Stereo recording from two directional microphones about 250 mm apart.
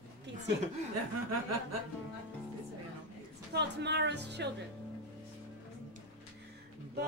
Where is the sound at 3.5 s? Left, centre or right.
Right.